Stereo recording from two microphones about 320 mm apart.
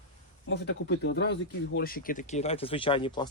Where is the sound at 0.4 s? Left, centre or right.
Left.